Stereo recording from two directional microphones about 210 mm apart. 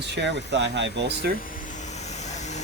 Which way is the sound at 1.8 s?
30° left (ahead or behind).